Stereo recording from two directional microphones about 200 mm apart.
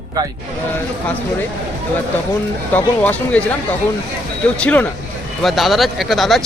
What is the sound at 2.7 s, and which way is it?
Speech, 10° left (ahead or behind).